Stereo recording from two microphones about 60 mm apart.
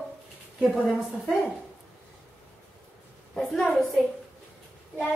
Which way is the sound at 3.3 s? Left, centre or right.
Centre.